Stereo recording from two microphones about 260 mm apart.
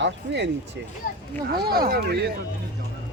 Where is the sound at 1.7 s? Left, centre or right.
Right.